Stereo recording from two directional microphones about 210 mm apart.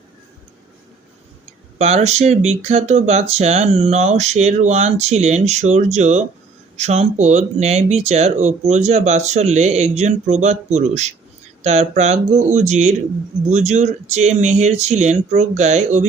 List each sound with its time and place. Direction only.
1.8 s speech: 30° right (ahead or behind)